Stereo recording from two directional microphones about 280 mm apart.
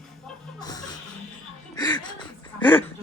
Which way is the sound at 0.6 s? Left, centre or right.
Centre.